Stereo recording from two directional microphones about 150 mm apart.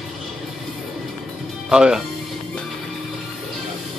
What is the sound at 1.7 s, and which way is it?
Speech, 5° right (ahead or behind).